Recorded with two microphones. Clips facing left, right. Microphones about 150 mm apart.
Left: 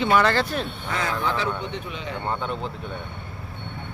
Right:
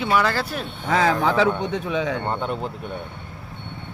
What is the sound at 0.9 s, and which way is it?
Speech, 90° right.